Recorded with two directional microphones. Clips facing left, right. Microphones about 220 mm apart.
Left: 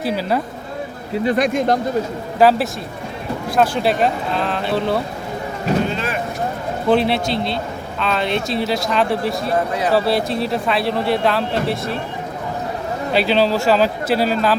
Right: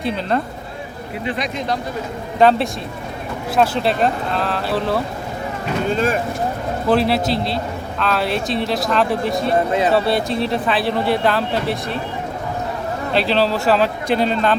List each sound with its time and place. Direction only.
0.0 s speech: 5° left (ahead or behind)
1.2 s speech: 45° left (ahead or behind)
2.4 s speech: 5° left (ahead or behind)
5.9 s speech: 45° right (ahead or behind)
6.8 s speech: centre (ahead or behind)
13.1 s speech: centre (ahead or behind)